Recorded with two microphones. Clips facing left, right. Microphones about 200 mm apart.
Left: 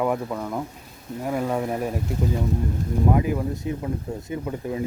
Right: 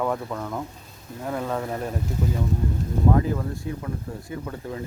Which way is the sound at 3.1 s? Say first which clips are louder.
Left 1 dB; 15° left (ahead or behind).